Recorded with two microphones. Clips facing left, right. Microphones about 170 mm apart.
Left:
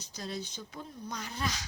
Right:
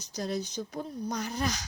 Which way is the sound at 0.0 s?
45° right (ahead or behind).